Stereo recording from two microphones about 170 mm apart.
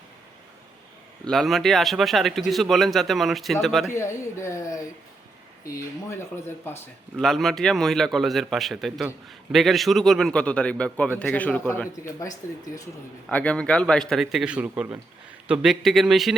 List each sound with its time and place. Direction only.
1.3 s a man's voice: centre (ahead or behind)
3.9 s a man's voice: 15° left (ahead or behind)
7.2 s a man's voice: centre (ahead or behind); by 12.4 s 20° left (ahead or behind)
13.3 s a man's voice: 5° left (ahead or behind)